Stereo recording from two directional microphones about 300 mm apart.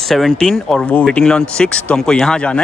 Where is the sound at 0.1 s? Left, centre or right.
Centre.